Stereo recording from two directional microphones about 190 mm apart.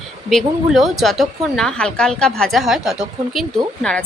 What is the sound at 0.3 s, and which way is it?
A woman's voice, centre (ahead or behind).